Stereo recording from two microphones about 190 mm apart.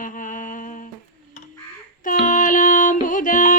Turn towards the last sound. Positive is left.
turn(degrees=45)  # may be behind; listen again after turning